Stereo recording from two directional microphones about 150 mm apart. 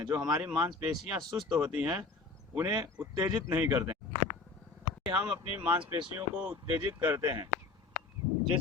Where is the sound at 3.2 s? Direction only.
5° right (ahead or behind).